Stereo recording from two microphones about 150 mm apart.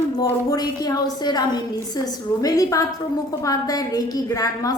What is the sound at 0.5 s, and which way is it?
A woman's voice, 25° left (ahead or behind).